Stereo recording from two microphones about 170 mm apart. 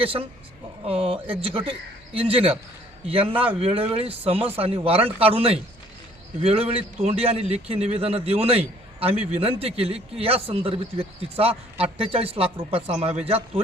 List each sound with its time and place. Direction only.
0.0 s a man's voice: 35° right (ahead or behind)